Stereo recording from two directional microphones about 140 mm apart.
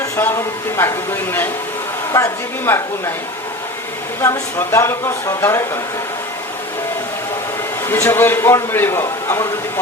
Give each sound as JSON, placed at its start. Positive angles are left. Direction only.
{"t": 0.0, "sound": "a man's voice", "side_deg": 20}
{"t": 4.2, "sound": "speech", "side_deg": 20}
{"t": 7.9, "sound": "a man's voice", "side_deg": 20}